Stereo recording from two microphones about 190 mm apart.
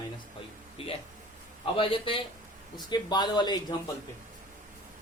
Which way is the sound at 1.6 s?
25° left (ahead or behind).